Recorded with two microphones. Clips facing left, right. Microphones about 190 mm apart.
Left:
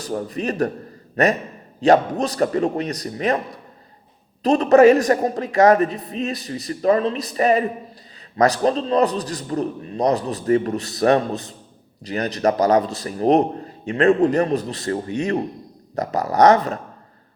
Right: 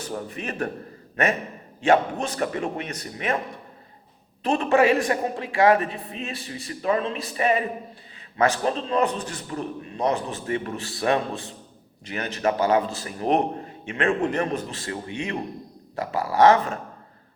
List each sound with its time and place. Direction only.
0.0 s a man's voice: 35° left (ahead or behind)
4.4 s a man's voice: 40° left (ahead or behind)